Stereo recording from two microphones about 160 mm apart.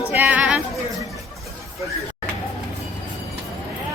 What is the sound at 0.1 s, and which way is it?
Music, 10° right (ahead or behind).